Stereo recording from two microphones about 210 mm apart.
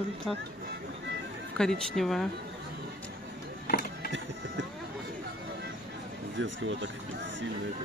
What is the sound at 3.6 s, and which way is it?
Music, 45° left (ahead or behind).